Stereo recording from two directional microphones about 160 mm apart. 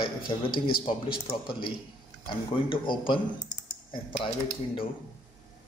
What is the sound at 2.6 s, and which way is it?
Speech, 30° left (ahead or behind).